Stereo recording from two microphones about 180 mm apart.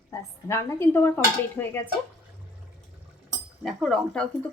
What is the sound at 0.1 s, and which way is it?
Dishes, 15° left (ahead or behind).